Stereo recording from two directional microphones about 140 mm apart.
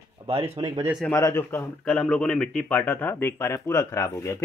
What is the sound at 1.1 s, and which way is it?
Speech, 20° left (ahead or behind).